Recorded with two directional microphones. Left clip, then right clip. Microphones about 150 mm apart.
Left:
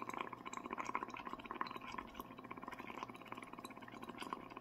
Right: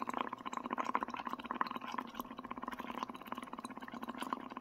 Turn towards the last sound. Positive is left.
turn(degrees=-25)  # may be behind; listen again after turning